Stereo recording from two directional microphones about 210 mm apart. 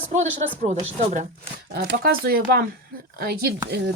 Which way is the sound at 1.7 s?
50° right (ahead or behind).